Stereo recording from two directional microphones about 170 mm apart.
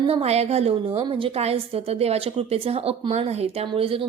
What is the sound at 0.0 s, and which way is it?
A woman's voice, 35° right (ahead or behind).